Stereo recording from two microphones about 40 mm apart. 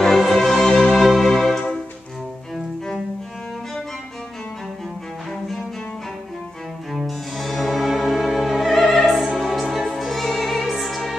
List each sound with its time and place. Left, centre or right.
0.0 s music: centre
7.1 s music: centre